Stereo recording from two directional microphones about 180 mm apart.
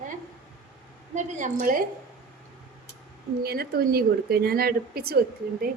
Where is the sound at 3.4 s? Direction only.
60° right (ahead or behind).